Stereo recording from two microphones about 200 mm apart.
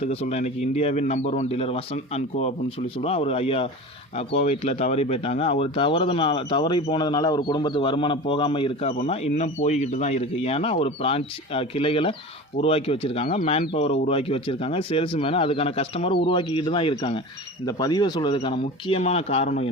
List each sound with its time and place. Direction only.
0.0 s a man's voice: 30° left (ahead or behind)